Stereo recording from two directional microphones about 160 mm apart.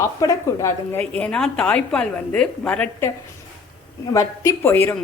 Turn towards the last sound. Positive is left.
turn(degrees=15)  # may be behind; listen again after turning